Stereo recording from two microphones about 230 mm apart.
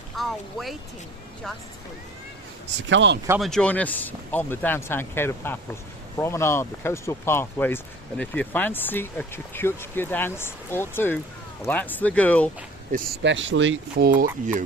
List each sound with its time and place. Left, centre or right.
0.2 s speech: centre
2.9 s speech: right
3.2 s speech: centre
13.2 s speech: right
14.1 s speech: right